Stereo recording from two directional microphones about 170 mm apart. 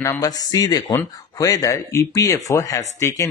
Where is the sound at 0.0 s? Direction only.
20° left (ahead or behind).